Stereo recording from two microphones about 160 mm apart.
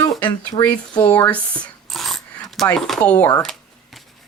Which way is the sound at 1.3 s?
10° left (ahead or behind).